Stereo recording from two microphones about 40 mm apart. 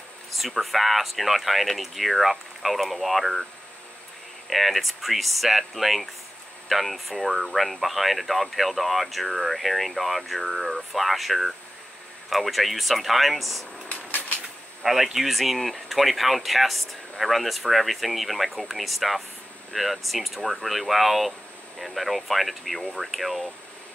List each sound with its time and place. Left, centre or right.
0.3 s speech: centre
4.5 s speech: centre
13.8 s a sound: left
14.8 s speech: centre